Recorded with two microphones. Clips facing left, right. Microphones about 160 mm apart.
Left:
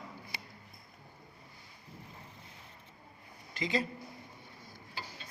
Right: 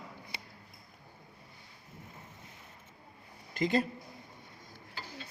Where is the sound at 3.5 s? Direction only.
50° right (ahead or behind).